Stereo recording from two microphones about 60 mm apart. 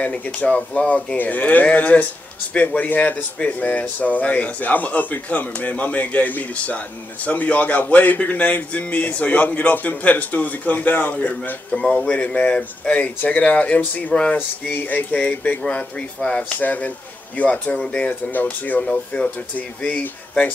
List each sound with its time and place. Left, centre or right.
0.0 s speech: left
15.6 s speech: centre
18.9 s speech: centre